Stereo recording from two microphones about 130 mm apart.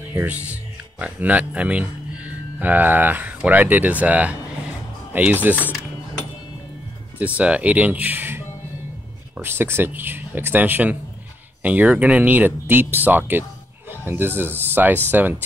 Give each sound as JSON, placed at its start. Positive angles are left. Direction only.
{"t": 0.0, "sound": "speech", "side_deg": -15}
{"t": 7.3, "sound": "speech", "side_deg": -10}